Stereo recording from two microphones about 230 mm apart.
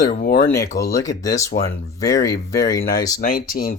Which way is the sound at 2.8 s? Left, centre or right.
Left.